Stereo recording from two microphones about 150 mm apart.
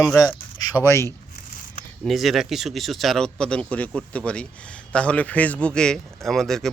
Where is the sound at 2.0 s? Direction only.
Centre (ahead or behind).